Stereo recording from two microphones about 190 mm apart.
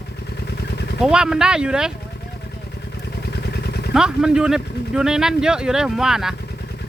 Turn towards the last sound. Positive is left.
turn(degrees=-5)  # may be behind; listen again after turning